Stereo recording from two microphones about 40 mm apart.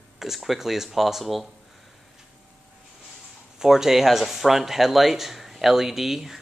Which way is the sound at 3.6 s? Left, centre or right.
Centre.